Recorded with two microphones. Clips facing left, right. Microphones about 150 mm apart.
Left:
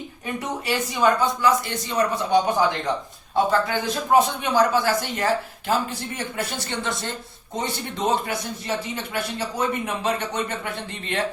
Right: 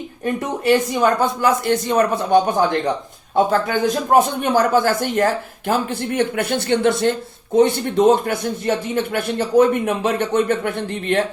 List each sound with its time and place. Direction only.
0.6 s speech: 55° right (ahead or behind)